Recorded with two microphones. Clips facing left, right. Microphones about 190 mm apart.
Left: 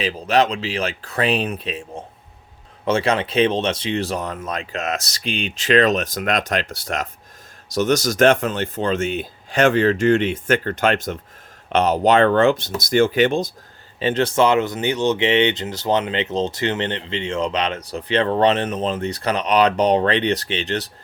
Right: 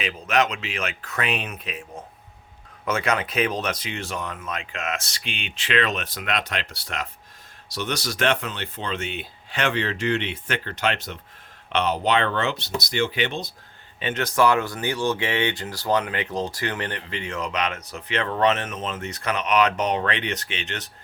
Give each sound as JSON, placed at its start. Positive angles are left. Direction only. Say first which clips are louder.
{"t": 0.0, "sound": "speech", "louder": "left 5 dB", "side_deg": 30}
{"t": 14.0, "sound": "speech", "louder": "left 4 dB", "side_deg": 30}